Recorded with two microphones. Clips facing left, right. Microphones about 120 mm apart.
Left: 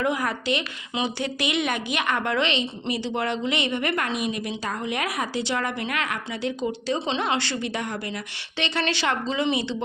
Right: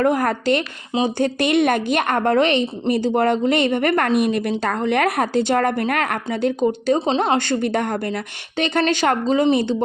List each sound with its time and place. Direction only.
0.0 s a woman's voice: 50° right (ahead or behind)